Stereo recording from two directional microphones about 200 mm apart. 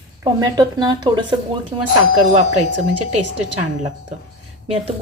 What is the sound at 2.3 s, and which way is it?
Speech, 35° right (ahead or behind).